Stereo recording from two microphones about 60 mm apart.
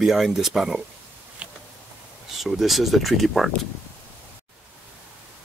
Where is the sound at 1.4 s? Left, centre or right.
Right.